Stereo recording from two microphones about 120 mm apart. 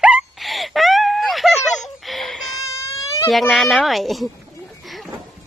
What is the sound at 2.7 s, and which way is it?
Baby cry, 25° left (ahead or behind).